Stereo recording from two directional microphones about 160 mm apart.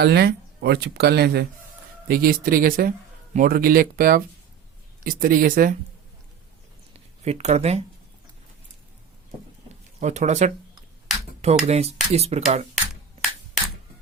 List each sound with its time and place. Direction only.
0.0 s speech: 90° right
2.0 s speech: 65° right (ahead or behind)
7.3 s speech: 45° right (ahead or behind)
10.0 s speech: 45° right (ahead or behind)
11.6 s speech: 40° right (ahead or behind)
12.7 s a sound: centre (ahead or behind)